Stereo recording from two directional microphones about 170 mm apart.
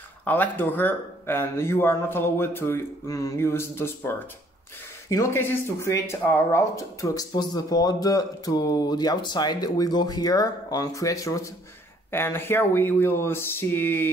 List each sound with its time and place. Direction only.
0.2 s speech: 10° left (ahead or behind)
5.1 s speech: 15° left (ahead or behind)